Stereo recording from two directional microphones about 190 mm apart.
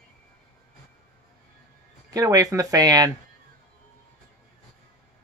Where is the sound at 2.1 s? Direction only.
20° right (ahead or behind).